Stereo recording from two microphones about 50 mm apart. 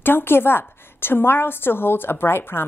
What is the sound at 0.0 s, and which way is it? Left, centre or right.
A woman's voice, left.